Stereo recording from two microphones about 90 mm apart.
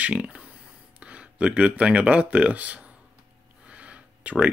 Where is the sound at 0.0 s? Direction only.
15° right (ahead or behind).